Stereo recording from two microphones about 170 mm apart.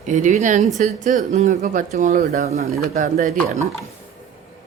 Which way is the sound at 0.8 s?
45° right (ahead or behind).